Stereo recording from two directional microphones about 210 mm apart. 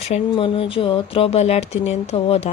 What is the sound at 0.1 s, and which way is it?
Speech, 25° left (ahead or behind).